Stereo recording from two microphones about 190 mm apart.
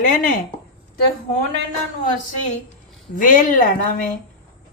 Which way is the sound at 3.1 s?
45° left (ahead or behind).